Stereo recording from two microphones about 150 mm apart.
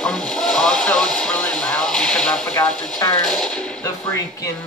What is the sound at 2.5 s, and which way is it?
Speech, 25° left (ahead or behind).